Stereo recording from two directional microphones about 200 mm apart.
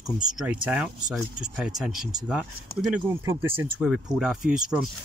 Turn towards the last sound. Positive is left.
turn(degrees=-5)  # may be behind; listen again after turning